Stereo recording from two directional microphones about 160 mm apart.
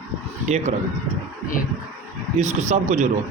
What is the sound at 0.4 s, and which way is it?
Speech, 45° right (ahead or behind).